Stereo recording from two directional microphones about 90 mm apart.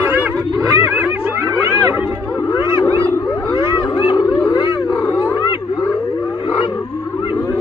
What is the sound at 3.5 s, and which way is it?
Whale vocalization, 65° left (ahead or behind).